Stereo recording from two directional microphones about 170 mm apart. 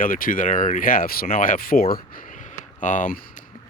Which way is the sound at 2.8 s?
50° left (ahead or behind).